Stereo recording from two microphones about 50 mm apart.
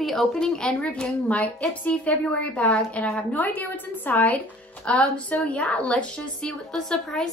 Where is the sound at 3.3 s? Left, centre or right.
Left.